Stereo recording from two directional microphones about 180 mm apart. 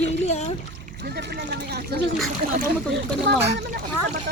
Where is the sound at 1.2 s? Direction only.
65° right (ahead or behind).